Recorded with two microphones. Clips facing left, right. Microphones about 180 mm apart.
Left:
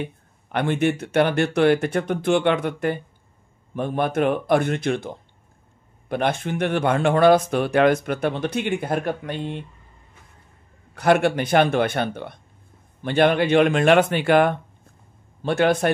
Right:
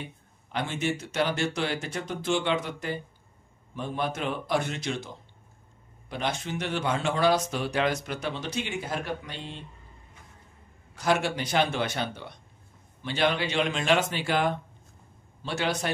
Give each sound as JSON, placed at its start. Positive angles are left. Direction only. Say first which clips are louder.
{"t": 0.0, "sound": "speech", "louder": "left 10 dB", "side_deg": 60}
{"t": 11.0, "sound": "a man's voice", "louder": "left 8 dB", "side_deg": 60}